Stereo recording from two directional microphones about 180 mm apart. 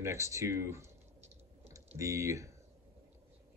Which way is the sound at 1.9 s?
15° right (ahead or behind).